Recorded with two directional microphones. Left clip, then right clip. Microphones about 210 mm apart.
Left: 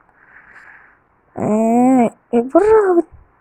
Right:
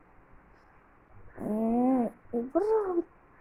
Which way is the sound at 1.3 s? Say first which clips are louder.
Left 15 dB; 45° left (ahead or behind).